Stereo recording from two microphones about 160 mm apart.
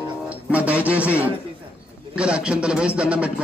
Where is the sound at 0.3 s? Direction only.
10° right (ahead or behind).